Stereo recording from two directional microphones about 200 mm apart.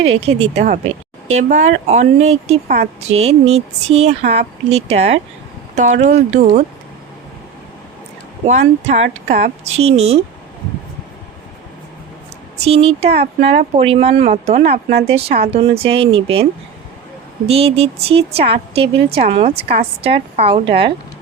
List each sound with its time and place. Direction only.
0.0 s speech: 30° right (ahead or behind)
8.4 s speech: 35° right (ahead or behind)
12.6 s speech: 30° right (ahead or behind)
17.5 s a woman's voice: 30° right (ahead or behind)